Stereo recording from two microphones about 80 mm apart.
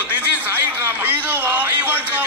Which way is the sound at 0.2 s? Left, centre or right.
Right.